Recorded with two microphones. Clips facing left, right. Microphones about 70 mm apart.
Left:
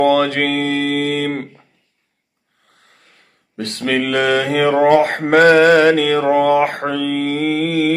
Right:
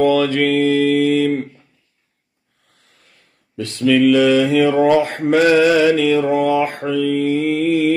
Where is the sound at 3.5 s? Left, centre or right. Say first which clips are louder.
Right 4 dB; left.